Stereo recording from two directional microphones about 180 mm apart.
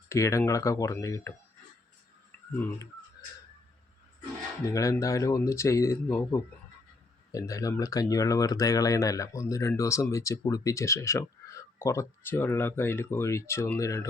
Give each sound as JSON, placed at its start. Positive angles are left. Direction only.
{"t": 0.1, "sound": "speech", "side_deg": 15}
{"t": 2.6, "sound": "speech", "side_deg": 10}
{"t": 4.7, "sound": "speech", "side_deg": 15}